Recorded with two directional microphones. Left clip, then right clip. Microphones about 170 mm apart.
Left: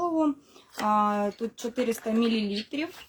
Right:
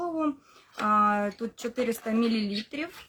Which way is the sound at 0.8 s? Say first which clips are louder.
Right 1 dB; 10° right (ahead or behind).